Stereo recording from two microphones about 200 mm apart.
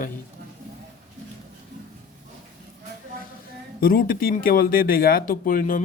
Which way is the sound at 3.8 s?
45° left (ahead or behind).